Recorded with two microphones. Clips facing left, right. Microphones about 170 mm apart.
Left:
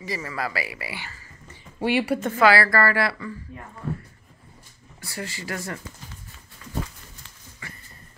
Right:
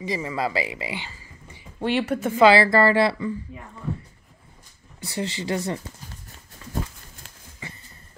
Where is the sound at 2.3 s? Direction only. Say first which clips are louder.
Right 4 dB; 25° right (ahead or behind).